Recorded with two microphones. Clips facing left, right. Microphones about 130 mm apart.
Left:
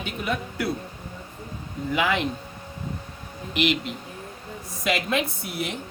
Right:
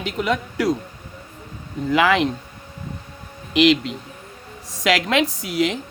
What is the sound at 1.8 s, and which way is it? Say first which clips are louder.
Speech: right 7 dB; 90° right.